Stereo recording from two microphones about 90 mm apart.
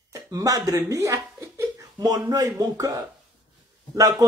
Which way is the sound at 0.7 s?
30° right (ahead or behind).